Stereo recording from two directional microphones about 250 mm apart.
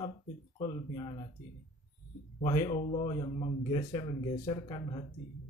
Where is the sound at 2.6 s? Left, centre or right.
Left.